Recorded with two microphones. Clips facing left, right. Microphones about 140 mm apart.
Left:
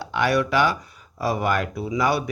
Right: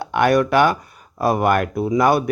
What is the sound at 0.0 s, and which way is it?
A man's voice, 55° right (ahead or behind).